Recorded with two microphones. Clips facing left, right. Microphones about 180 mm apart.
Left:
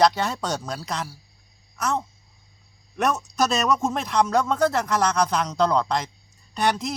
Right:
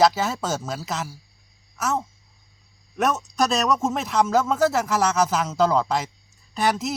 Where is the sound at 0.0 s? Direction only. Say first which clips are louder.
Right 1 dB; 5° right (ahead or behind).